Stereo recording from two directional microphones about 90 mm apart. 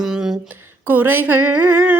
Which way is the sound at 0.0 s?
5° right (ahead or behind).